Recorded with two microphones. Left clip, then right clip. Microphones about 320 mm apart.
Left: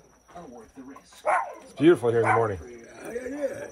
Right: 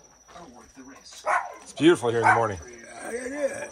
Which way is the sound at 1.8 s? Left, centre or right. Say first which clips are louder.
Even; centre.